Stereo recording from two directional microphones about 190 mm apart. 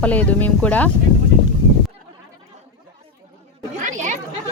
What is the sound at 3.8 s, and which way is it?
Chatter, 40° right (ahead or behind).